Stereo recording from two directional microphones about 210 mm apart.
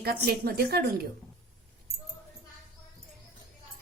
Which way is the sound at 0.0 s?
50° right (ahead or behind).